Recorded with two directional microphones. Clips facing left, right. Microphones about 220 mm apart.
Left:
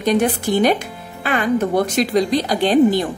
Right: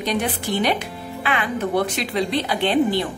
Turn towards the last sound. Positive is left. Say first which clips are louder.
# left 5 dB
turn(degrees=40)  # may be behind; listen again after turning